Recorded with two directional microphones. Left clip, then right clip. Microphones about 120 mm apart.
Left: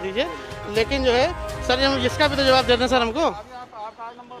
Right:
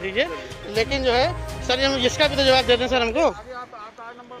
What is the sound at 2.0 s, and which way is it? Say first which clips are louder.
Speech: right 1 dB; 15° left (ahead or behind).